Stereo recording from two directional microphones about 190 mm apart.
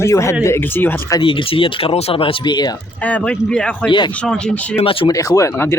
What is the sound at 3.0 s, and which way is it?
Speech, 5° left (ahead or behind).